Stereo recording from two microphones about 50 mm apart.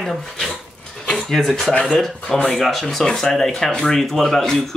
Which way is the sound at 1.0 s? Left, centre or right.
Centre.